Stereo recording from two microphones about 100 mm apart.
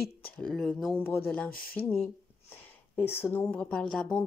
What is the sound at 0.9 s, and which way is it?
A woman's voice, 20° left (ahead or behind).